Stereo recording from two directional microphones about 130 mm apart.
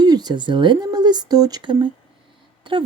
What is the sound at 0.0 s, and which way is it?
A woman's voice, 30° right (ahead or behind).